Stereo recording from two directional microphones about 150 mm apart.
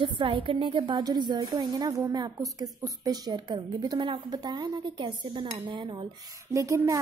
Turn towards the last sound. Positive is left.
turn(degrees=-20)  # may be behind; listen again after turning